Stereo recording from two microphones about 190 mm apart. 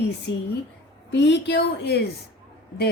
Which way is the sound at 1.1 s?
65° left (ahead or behind).